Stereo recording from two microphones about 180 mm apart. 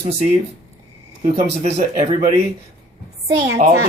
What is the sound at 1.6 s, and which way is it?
Speech, 40° right (ahead or behind).